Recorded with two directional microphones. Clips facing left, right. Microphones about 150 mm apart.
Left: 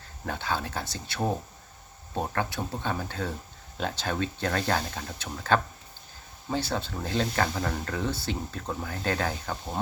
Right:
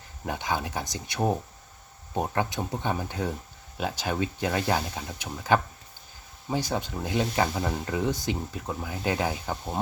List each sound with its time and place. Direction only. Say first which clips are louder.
0.3 s speech: right 1 dB; 15° right (ahead or behind)